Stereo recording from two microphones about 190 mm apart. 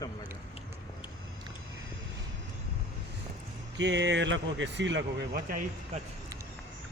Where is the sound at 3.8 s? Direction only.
70° right (ahead or behind); by 6.0 s 45° right (ahead or behind).